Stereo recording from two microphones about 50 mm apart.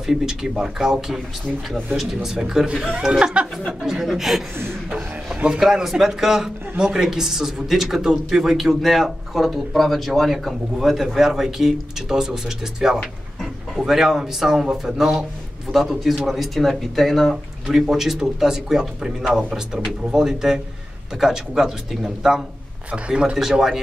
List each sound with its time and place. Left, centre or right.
0.0 s speech: centre
3.8 s speech: centre
5.5 s speech: centre
22.8 s a man's voice: right
23.3 s speech: centre